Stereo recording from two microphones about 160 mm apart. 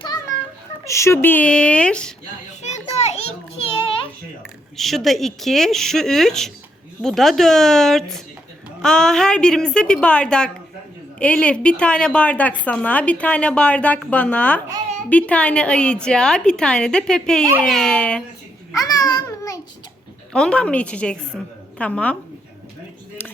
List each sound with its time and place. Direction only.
0.9 s a woman's voice: 20° left (ahead or behind)
2.6 s children playing: 45° left (ahead or behind)
4.8 s a woman's voice: centre (ahead or behind)
18.8 s babbling: 25° left (ahead or behind)
20.3 s a woman's voice: 5° left (ahead or behind)